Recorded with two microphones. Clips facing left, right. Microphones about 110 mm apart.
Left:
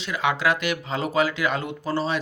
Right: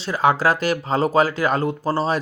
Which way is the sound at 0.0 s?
35° right (ahead or behind).